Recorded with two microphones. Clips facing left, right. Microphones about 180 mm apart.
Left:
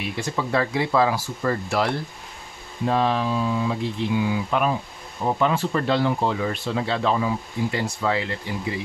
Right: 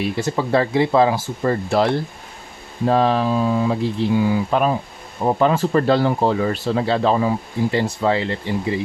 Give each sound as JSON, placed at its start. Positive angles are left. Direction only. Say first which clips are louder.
{"t": 0.0, "sound": "speech", "louder": "right 6 dB", "side_deg": -35}
{"t": 2.8, "sound": "speech", "louder": "right 5 dB", "side_deg": -40}